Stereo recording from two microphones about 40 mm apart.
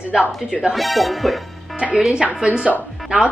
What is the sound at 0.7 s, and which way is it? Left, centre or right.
Speech, centre.